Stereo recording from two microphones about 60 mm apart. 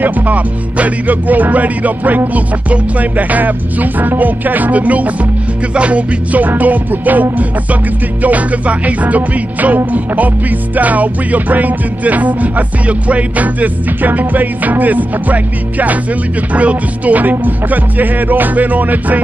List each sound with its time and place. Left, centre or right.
0.0 s music: right